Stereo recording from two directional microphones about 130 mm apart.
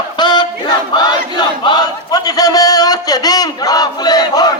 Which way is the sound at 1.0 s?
30° left (ahead or behind).